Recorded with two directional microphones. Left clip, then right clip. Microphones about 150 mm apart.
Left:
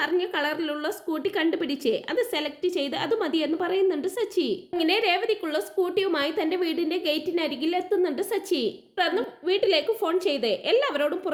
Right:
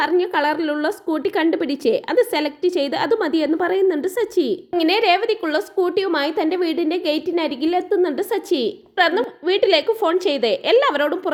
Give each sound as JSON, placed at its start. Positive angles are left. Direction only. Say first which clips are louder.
{"t": 0.0, "sound": "a woman's voice", "louder": "right 7 dB", "side_deg": -25}